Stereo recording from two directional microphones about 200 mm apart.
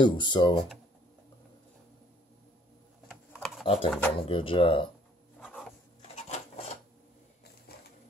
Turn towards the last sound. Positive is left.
turn(degrees=50)  # may be behind; listen again after turning